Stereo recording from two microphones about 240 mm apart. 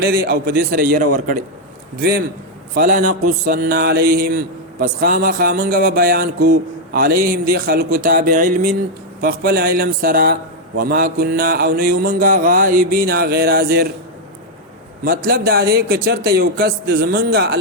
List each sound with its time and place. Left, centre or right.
0.0 s mantra: right
15.0 s mantra: right